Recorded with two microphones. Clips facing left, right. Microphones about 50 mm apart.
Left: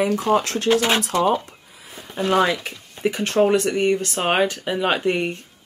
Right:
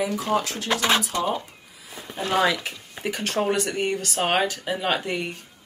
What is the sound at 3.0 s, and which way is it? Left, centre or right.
Speech, centre.